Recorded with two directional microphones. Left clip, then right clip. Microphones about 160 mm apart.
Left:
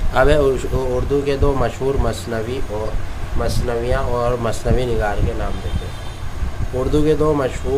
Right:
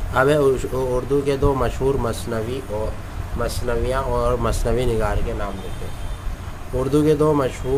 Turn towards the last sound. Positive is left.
turn(degrees=-25)  # may be behind; listen again after turning